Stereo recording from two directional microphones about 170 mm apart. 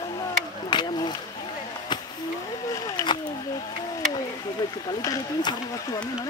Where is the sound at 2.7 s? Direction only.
20° left (ahead or behind).